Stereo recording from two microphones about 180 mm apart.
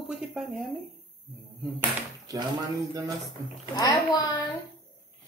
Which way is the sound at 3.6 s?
25° left (ahead or behind).